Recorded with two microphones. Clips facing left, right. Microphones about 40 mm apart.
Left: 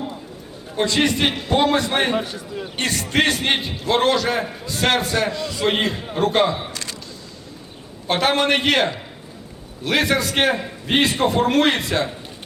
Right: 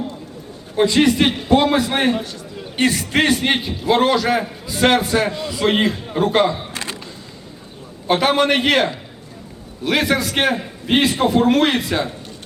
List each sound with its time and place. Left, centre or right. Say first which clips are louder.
0.8 s a man's voice: right 4 dB; centre
2.1 s a man's voice: left 2 dB; centre
2.7 s a man's voice: right 3 dB; centre
6.7 s a sound: right 4 dB; right
8.0 s a man's voice: right 3 dB; centre